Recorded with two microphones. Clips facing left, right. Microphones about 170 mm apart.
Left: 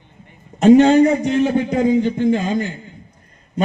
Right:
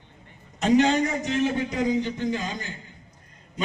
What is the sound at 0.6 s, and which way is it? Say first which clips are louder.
A man's voice: left 10 dB; 55° left (ahead or behind).